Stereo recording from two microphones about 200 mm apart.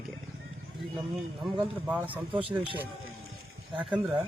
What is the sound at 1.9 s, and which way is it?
Speech, 10° right (ahead or behind).